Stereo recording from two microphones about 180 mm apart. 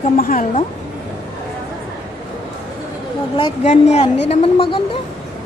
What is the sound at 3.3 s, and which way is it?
A woman's voice, 30° left (ahead or behind).